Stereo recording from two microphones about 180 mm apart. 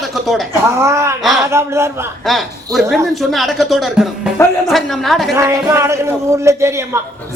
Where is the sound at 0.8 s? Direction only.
15° right (ahead or behind).